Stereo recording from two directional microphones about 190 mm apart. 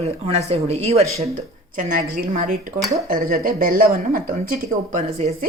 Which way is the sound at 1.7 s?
45° right (ahead or behind).